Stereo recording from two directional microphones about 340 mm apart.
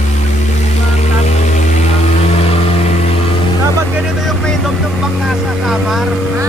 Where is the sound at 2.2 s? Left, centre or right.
Centre.